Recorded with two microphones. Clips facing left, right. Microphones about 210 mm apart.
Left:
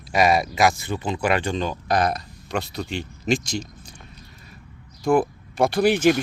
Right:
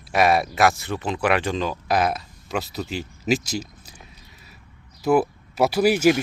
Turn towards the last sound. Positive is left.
turn(degrees=-5)  # may be behind; listen again after turning